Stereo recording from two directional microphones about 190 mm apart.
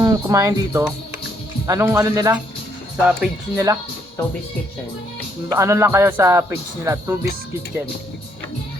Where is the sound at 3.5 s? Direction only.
20° right (ahead or behind).